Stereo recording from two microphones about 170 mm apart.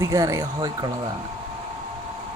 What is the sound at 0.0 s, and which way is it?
Speech, 20° right (ahead or behind).